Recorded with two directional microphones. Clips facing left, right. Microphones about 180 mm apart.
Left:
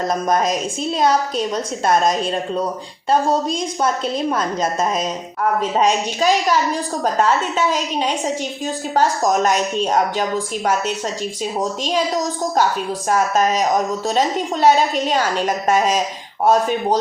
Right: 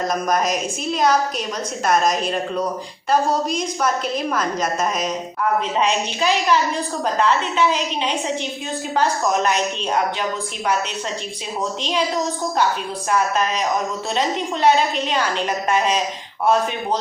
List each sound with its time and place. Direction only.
0.1 s a woman's voice: 25° left (ahead or behind)
5.8 s a woman's voice: 45° left (ahead or behind)